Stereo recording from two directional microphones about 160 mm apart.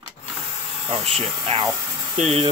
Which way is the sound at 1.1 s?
35° right (ahead or behind).